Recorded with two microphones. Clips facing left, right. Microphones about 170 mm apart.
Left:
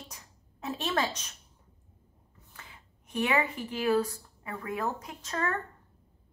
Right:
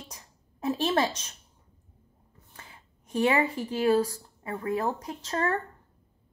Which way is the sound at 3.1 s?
30° right (ahead or behind).